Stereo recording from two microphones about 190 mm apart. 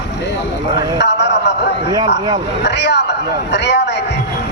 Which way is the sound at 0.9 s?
65° left (ahead or behind).